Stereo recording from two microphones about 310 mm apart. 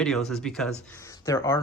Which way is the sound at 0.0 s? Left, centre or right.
Centre.